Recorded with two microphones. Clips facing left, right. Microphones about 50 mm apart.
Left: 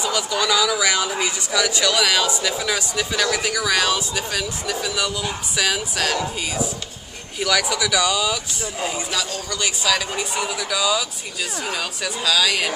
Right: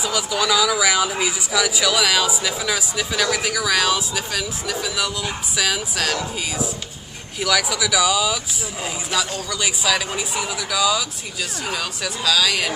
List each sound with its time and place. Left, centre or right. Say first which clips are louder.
0.0 s speech: even; centre
7.3 s speech: even; centre